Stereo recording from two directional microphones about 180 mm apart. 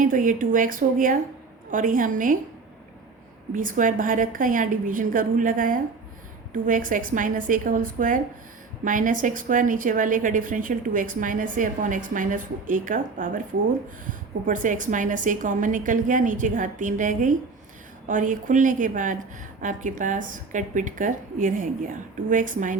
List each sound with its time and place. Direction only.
0.0 s a woman's voice: 50° right (ahead or behind)
3.5 s a woman's voice: 50° right (ahead or behind)